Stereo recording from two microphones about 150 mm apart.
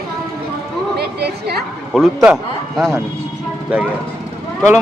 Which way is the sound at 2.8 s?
20° right (ahead or behind).